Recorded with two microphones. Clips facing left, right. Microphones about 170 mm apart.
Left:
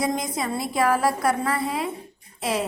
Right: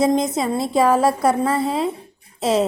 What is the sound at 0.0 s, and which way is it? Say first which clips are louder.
A woman's voice: right 8 dB; 25° right (ahead or behind).